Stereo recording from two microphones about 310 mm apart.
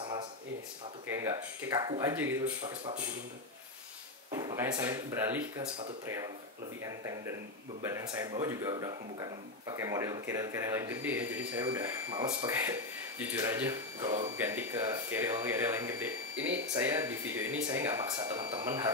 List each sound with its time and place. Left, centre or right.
1.0 s speech: centre
4.3 s speech: centre